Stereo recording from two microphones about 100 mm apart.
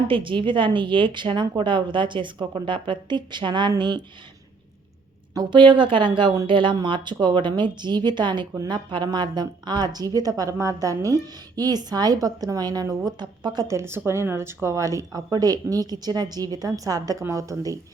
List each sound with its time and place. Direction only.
0.1 s a woman's voice: 60° right (ahead or behind)
5.3 s a woman's voice: 50° right (ahead or behind)
13.7 s a woman's voice: 25° right (ahead or behind)